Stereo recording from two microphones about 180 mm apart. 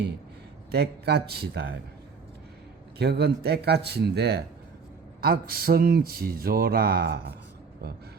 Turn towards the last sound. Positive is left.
turn(degrees=-60)  # may be behind; listen again after turning